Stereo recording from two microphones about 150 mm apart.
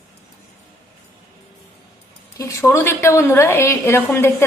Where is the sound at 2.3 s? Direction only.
20° left (ahead or behind).